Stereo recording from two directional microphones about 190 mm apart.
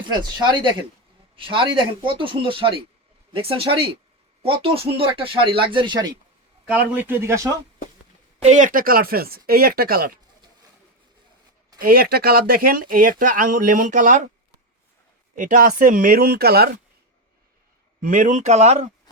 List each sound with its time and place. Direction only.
0.0 s speech: 25° right (ahead or behind)
6.7 s speech: 10° right (ahead or behind)
8.4 s speech: 40° right (ahead or behind)
11.8 s speech: 50° right (ahead or behind)
15.4 s speech: 45° right (ahead or behind)
18.0 s speech: 45° right (ahead or behind)
19.1 s a sound: 20° left (ahead or behind)